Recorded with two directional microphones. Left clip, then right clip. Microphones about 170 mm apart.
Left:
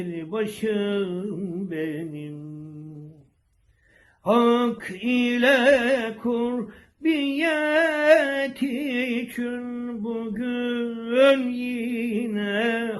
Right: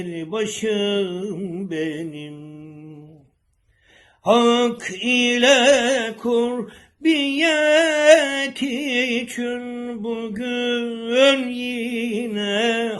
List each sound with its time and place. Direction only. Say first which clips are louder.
0.0 s music: right 3 dB; 35° right (ahead or behind)
4.2 s music: right 4 dB; 35° right (ahead or behind)